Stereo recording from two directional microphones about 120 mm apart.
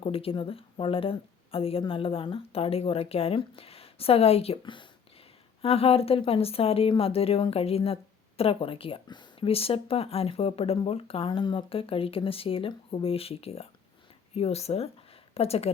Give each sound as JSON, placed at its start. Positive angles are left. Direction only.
{"t": 0.0, "sound": "a woman's voice", "side_deg": 50}
{"t": 5.6, "sound": "a woman's voice", "side_deg": 55}
{"t": 9.5, "sound": "a woman's voice", "side_deg": 55}